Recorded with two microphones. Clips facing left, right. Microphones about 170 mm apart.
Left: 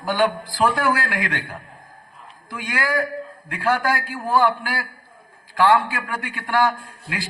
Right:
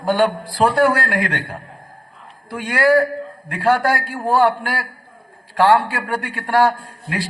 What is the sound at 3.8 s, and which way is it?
A man's voice, 65° right (ahead or behind).